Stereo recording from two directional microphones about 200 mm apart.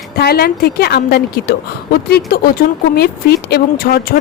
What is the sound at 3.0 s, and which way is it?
Speech, 55° left (ahead or behind).